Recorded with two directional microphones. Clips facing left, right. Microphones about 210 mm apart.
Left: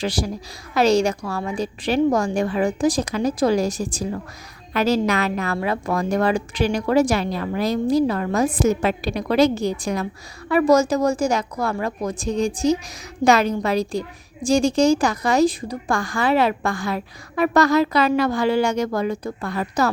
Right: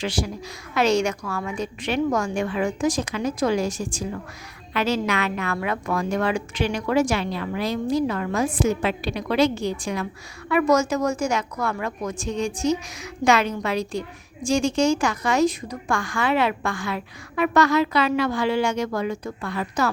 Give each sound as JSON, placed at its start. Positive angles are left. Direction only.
{"t": 0.0, "sound": "a woman's voice", "side_deg": 35}